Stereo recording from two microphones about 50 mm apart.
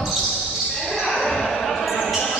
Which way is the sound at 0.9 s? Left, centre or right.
Centre.